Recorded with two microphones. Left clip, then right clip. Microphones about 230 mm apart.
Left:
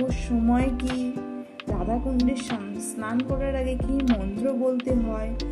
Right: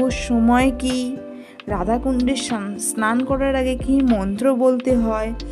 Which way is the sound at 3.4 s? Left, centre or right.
Right.